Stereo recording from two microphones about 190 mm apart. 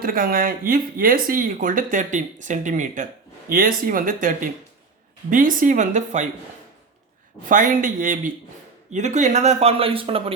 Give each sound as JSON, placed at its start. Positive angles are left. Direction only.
{"t": 0.0, "sound": "a man's voice", "side_deg": -50}
{"t": 7.4, "sound": "a man's voice", "side_deg": -45}